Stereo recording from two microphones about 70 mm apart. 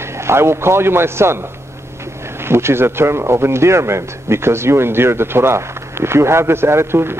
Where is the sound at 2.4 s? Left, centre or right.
Right.